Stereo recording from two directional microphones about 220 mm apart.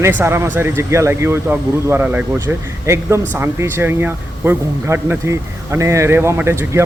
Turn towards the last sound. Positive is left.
turn(degrees=-10)  # may be behind; listen again after turning